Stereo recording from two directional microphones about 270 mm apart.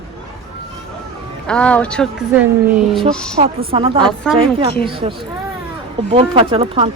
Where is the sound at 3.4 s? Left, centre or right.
Right.